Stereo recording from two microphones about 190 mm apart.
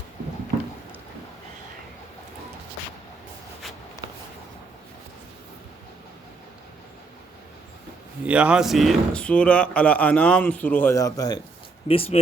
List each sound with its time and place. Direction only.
8.3 s speech: 5° right (ahead or behind); by 11.3 s 20° left (ahead or behind)
11.9 s speech: 30° left (ahead or behind)